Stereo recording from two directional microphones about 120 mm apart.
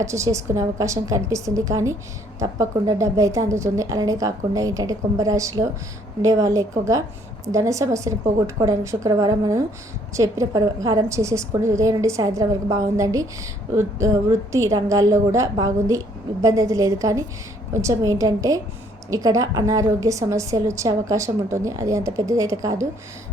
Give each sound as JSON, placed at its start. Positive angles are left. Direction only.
{"t": 0.0, "sound": "a woman's voice", "side_deg": -25}